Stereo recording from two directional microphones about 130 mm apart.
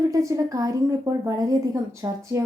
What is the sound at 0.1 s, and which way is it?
Speech, 25° right (ahead or behind).